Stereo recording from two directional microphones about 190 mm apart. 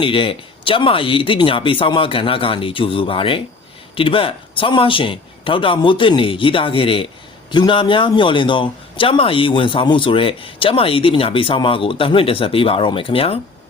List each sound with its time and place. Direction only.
0.0 s speech: 30° left (ahead or behind)